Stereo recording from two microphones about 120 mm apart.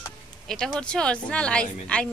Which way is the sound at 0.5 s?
5° left (ahead or behind).